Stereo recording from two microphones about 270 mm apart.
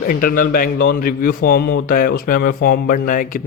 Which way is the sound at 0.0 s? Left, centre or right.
Left.